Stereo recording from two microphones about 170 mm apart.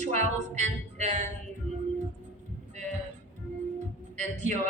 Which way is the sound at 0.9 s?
45° right (ahead or behind).